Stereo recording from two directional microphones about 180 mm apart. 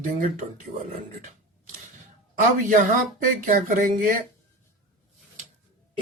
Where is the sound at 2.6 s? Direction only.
45° right (ahead or behind).